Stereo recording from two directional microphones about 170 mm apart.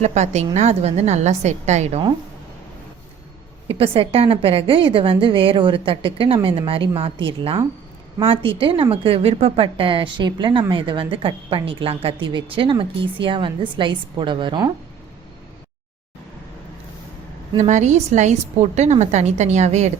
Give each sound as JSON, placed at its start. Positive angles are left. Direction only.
{"t": 0.0, "sound": "a woman's voice", "side_deg": -40}
{"t": 3.7, "sound": "a woman's voice", "side_deg": -35}
{"t": 17.6, "sound": "a woman's voice", "side_deg": -45}